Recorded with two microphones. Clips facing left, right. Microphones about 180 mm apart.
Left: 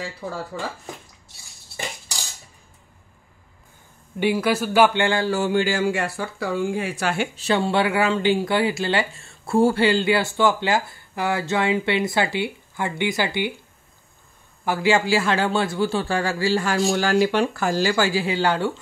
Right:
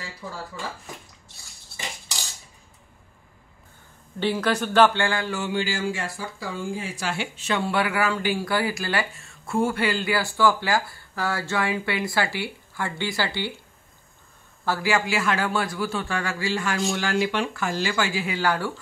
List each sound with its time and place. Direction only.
4.2 s speech: 10° left (ahead or behind)
5.0 s speech: 30° left (ahead or behind); by 7.2 s 55° left (ahead or behind)
7.3 s speech: 30° left (ahead or behind)
14.6 s a man's voice: 20° left (ahead or behind)